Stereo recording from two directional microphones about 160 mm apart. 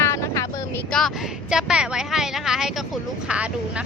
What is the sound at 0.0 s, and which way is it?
Vehicle, 20° left (ahead or behind).